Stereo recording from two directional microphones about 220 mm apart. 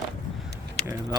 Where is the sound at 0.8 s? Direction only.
20° right (ahead or behind).